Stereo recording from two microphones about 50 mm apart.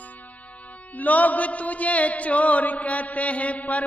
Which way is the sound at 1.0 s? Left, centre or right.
Left.